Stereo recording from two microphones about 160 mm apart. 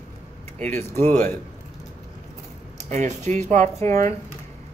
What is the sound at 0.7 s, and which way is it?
Speech, 15° left (ahead or behind).